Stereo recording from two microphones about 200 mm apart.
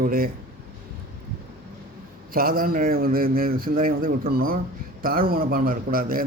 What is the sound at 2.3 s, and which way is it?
A man's voice, 45° right (ahead or behind).